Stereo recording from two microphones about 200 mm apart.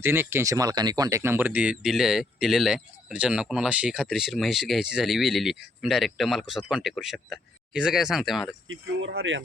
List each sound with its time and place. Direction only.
0.0 s speech: 10° right (ahead or behind)
8.6 s speech: 70° right (ahead or behind)